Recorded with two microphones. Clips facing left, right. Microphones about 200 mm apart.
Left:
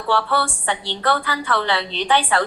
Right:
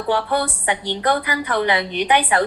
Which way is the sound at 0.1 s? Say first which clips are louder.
Even; 15° right (ahead or behind).